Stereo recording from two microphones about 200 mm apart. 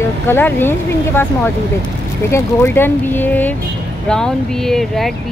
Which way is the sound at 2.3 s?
10° left (ahead or behind).